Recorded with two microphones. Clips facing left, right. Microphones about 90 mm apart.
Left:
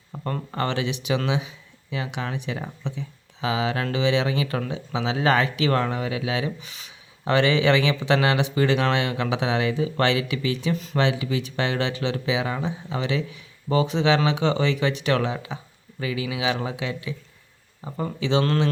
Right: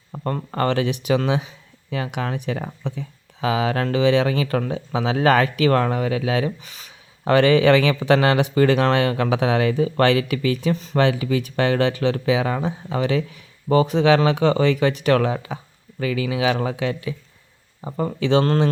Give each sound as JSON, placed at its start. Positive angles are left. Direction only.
{"t": 0.1, "sound": "speech", "side_deg": -40}
{"t": 10.8, "sound": "speech", "side_deg": -35}
{"t": 11.0, "sound": "speech", "side_deg": -45}
{"t": 18.0, "sound": "speech", "side_deg": -50}